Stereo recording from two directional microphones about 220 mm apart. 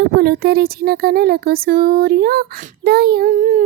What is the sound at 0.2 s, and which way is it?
A woman's voice, 45° right (ahead or behind).